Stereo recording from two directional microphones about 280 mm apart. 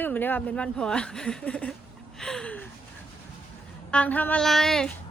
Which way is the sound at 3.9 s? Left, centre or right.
Centre.